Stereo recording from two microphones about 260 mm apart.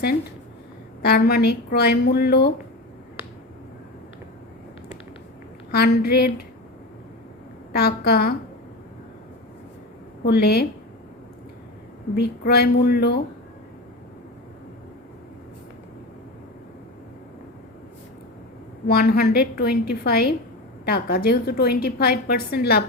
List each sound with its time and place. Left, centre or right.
1.0 s a woman's voice: left
5.7 s a woman's voice: left
7.7 s a woman's voice: left
10.2 s a woman's voice: left
12.1 s a woman's voice: left
18.9 s a woman's voice: left